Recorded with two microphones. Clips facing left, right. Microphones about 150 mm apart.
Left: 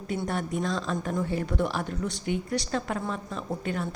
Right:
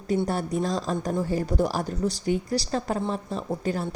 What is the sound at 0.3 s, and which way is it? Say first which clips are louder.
Speech: right 3 dB; 35° right (ahead or behind).